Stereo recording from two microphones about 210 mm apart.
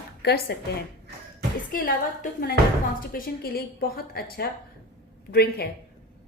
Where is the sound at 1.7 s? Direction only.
45° left (ahead or behind).